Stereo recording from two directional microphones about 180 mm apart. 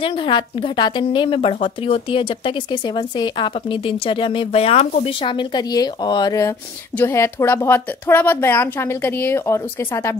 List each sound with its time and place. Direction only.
0.0 s speech: 30° left (ahead or behind)